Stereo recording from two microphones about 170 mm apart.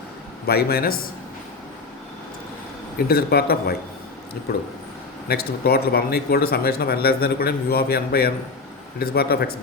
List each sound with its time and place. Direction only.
0.4 s speech: 65° left (ahead or behind)
3.1 s speech: 65° left (ahead or behind)